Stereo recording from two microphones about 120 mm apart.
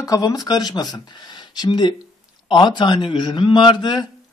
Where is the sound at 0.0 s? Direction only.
30° left (ahead or behind).